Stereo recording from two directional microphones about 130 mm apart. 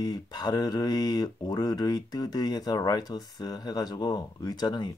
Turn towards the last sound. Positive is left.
turn(degrees=35)  # may be behind; listen again after turning